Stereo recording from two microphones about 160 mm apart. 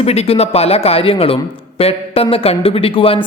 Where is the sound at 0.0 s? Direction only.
40° left (ahead or behind).